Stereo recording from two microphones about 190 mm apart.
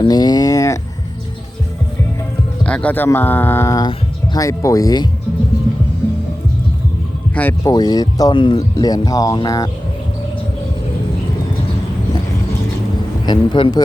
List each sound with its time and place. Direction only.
0.0 s a sound: 20° left (ahead or behind)
2.6 s speech: 5° left (ahead or behind)
7.3 s speech: 15° left (ahead or behind)
13.2 s speech: 25° left (ahead or behind)